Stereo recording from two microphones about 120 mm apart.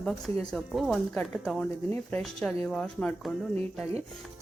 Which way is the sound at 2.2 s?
Centre (ahead or behind).